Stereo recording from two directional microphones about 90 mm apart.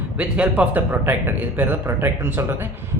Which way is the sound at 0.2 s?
10° right (ahead or behind).